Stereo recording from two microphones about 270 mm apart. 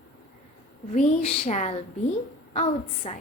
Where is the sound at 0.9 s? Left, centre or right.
Left.